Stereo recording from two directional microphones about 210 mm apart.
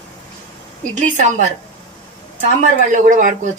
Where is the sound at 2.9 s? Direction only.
35° right (ahead or behind).